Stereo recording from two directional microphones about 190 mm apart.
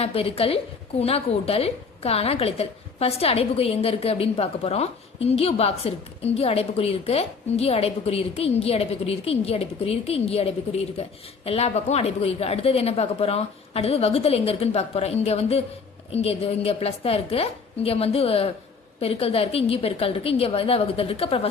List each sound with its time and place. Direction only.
0.0 s a woman's voice: 30° left (ahead or behind)